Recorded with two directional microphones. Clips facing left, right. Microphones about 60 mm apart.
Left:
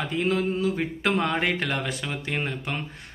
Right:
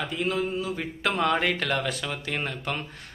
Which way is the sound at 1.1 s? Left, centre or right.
Left.